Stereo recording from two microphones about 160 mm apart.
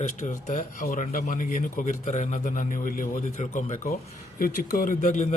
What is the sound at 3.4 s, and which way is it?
Speech, 40° left (ahead or behind).